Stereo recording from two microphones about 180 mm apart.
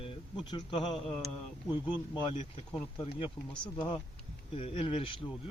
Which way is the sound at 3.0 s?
30° left (ahead or behind).